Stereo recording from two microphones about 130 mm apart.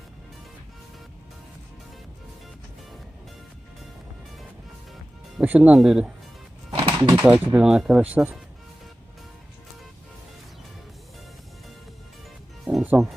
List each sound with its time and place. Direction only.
5.4 s speech: 10° right (ahead or behind)
6.7 s music: 35° right (ahead or behind)
7.2 s speech: 10° right (ahead or behind)
12.7 s music: 10° right (ahead or behind)